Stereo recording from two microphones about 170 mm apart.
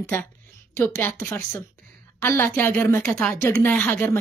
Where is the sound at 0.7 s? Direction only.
10° left (ahead or behind).